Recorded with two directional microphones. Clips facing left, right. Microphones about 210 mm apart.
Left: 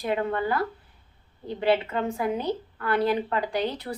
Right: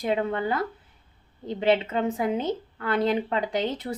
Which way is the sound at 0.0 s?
20° right (ahead or behind).